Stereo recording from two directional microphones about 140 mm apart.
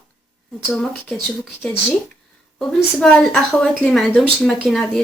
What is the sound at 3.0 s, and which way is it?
A woman's voice, 5° left (ahead or behind).